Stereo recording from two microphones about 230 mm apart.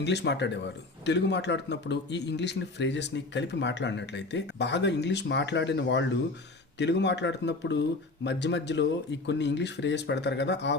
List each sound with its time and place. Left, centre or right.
0.0 s a man's voice: left